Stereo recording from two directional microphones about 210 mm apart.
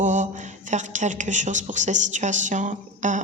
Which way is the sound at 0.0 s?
35° right (ahead or behind).